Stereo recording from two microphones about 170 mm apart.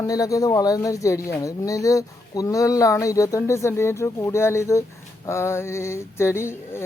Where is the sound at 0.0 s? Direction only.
20° left (ahead or behind).